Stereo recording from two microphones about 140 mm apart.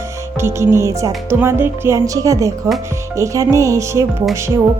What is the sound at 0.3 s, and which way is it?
Speech, 20° right (ahead or behind).